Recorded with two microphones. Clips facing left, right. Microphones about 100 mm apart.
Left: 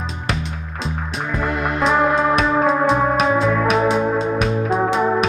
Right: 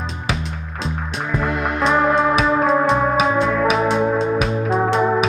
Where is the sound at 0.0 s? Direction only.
Centre (ahead or behind).